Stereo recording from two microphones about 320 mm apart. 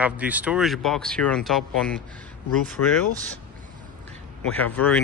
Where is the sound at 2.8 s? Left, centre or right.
Left.